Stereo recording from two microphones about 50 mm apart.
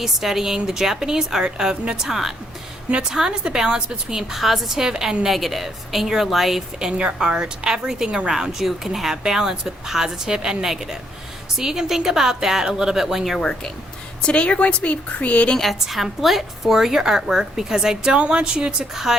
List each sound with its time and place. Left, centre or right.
0.0 s a woman's voice: centre
6.7 s a woman's voice: centre
14.2 s a woman's voice: left
15.5 s a woman's voice: centre